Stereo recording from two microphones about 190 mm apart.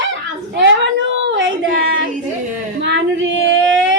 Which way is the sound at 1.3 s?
80° right.